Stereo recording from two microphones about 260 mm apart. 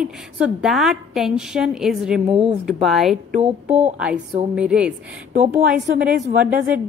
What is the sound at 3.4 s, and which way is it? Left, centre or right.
Speech, right.